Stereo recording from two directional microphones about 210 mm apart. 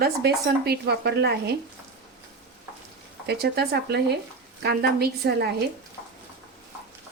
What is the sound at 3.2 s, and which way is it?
A woman's voice, 50° right (ahead or behind).